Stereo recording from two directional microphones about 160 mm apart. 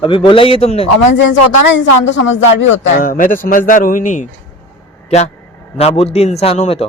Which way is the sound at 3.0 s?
60° left (ahead or behind).